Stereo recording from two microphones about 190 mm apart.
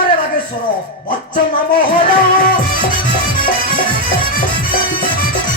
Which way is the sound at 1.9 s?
50° left (ahead or behind).